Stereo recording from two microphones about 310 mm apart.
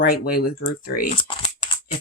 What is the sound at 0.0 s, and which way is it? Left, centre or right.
Speech, left.